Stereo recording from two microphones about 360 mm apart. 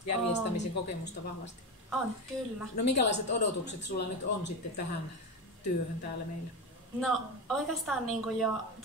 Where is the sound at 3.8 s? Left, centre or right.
Left.